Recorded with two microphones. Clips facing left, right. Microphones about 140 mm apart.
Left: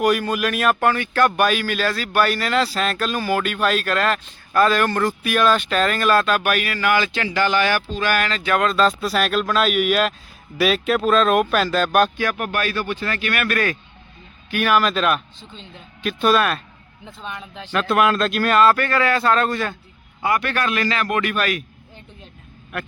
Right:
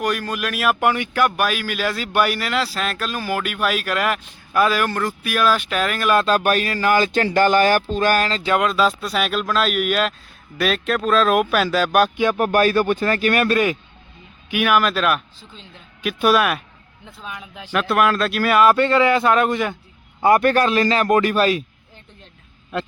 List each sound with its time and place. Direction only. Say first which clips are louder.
0.0 s speech: left 4 dB; 5° left (ahead or behind)
6.1 s a man's voice: right 2 dB; 35° right (ahead or behind)
8.6 s speech: left 1 dB; 5° right (ahead or behind)
12.1 s a man's voice: right 4 dB; 20° right (ahead or behind)
12.4 s a man's voice: right 7 dB; 40° right (ahead or behind)
14.5 s speech: even; 5° right (ahead or behind)
18.8 s a man's voice: right 4 dB; 25° right (ahead or behind)
20.2 s a man's voice: right 7 dB; 40° right (ahead or behind)